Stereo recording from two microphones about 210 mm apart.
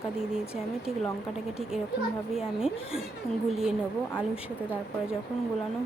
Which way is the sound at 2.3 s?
5° right (ahead or behind).